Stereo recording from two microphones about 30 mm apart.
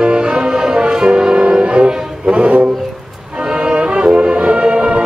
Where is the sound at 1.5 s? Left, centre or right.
Right.